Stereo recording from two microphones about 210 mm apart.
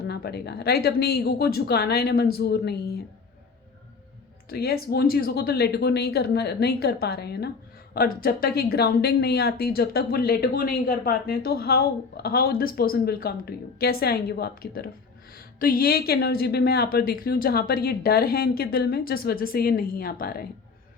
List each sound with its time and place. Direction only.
0.0 s speech: 50° left (ahead or behind)
4.4 s speech: 45° left (ahead or behind)